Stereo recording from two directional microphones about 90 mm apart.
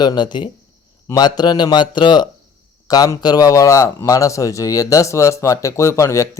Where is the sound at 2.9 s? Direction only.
45° left (ahead or behind).